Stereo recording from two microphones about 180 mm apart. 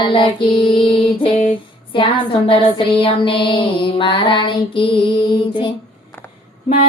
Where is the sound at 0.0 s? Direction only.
25° left (ahead or behind).